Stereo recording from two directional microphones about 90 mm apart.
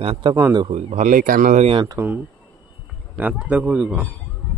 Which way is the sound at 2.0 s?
50° right (ahead or behind).